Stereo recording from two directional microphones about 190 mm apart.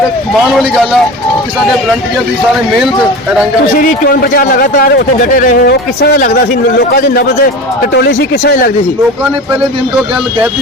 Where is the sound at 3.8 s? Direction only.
50° left (ahead or behind).